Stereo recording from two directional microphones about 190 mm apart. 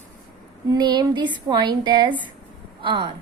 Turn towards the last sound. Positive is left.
turn(degrees=-25)  # may be behind; listen again after turning